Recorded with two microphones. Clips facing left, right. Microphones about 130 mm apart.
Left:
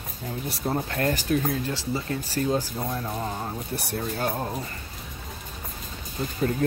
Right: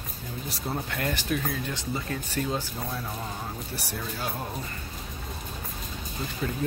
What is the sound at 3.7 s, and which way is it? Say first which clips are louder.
Speech: left 5 dB; 55° left (ahead or behind).